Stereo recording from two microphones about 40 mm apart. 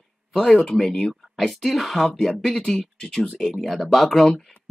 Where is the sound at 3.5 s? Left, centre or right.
Centre.